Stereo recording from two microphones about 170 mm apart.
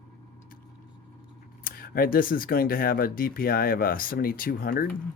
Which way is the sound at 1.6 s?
60° left (ahead or behind).